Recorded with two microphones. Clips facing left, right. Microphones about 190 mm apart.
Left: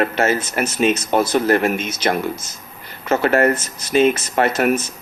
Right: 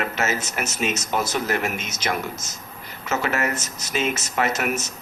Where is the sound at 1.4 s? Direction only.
55° left (ahead or behind).